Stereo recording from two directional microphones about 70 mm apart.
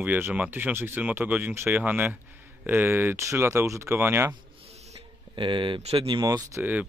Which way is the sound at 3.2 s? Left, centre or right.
Right.